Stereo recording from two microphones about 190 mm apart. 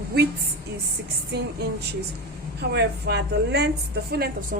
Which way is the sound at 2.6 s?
60° right (ahead or behind).